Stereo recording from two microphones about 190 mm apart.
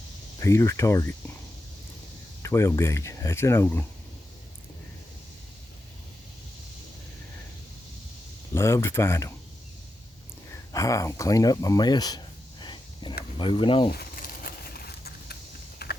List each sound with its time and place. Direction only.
0.3 s speech: 15° left (ahead or behind)
2.4 s speech: 15° left (ahead or behind)
8.5 s speech: 15° left (ahead or behind)
10.7 s speech: 15° left (ahead or behind)
13.9 s a sound: 50° left (ahead or behind)
15.8 s typing: 55° left (ahead or behind)